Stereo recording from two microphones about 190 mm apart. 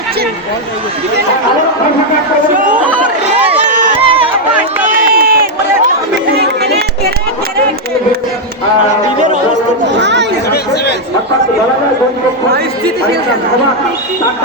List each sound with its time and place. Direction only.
3.7 s run: 40° right (ahead or behind)
4.0 s a sound: 30° right (ahead or behind)
4.9 s run: 50° right (ahead or behind)
6.3 s chatter: 60° right (ahead or behind)
10.0 s chatter: 65° right (ahead or behind)